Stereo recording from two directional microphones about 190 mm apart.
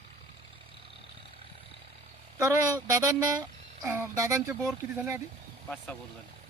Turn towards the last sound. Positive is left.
turn(degrees=5)  # may be behind; listen again after turning